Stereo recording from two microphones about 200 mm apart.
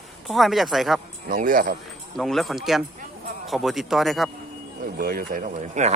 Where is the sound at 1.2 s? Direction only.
40° right (ahead or behind).